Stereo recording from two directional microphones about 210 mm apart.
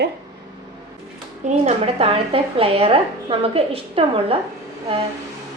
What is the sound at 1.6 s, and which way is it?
A woman's voice, 25° right (ahead or behind).